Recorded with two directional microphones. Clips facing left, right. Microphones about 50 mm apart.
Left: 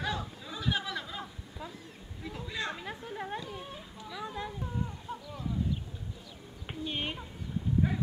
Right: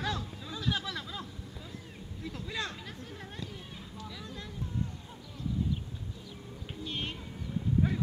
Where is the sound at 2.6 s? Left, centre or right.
Left.